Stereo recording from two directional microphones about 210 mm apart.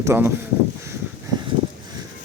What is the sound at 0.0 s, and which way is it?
Speech, 10° right (ahead or behind).